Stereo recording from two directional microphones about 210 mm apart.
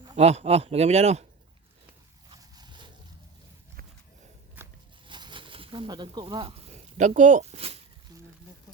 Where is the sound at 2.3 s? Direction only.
20° right (ahead or behind).